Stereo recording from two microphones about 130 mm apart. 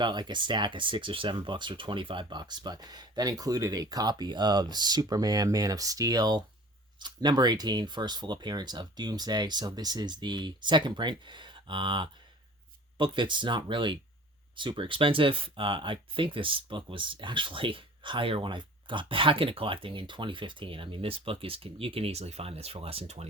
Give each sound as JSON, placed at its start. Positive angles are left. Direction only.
{"t": 0.0, "sound": "speech", "side_deg": -35}